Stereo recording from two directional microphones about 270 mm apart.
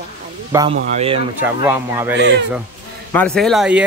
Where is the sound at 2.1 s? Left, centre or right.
Right.